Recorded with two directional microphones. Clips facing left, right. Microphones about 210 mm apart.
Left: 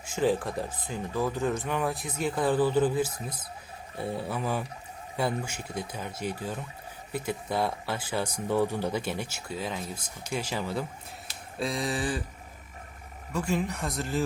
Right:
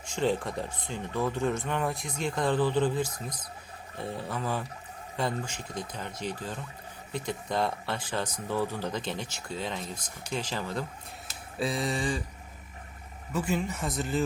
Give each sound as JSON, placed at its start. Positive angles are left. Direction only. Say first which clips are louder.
{"t": 0.0, "sound": "speech", "louder": "left 2 dB", "side_deg": 5}
{"t": 13.3, "sound": "speech", "louder": "left 1 dB", "side_deg": -5}